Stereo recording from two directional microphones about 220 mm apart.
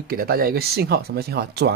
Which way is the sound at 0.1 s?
45° right (ahead or behind).